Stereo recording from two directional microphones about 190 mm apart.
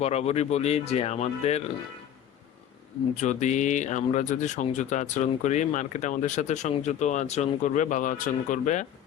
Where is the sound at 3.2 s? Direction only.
40° left (ahead or behind).